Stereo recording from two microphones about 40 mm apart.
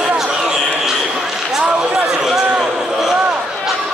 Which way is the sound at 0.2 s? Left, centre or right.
Centre.